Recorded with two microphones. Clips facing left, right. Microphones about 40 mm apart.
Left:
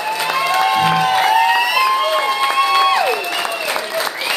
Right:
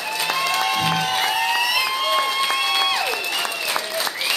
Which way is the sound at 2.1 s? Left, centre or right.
Centre.